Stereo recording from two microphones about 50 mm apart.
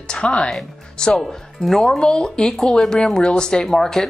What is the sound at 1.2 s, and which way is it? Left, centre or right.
Speech, centre.